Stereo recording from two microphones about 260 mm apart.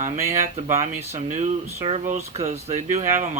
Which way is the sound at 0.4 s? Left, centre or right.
Right.